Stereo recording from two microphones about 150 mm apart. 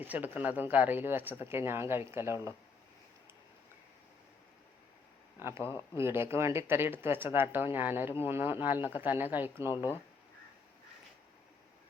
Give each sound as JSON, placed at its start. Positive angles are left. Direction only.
{"t": 0.0, "sound": "speech", "side_deg": -10}
{"t": 5.4, "sound": "speech", "side_deg": -15}
{"t": 5.6, "sound": "speech", "side_deg": 30}
{"t": 6.0, "sound": "speech", "side_deg": -15}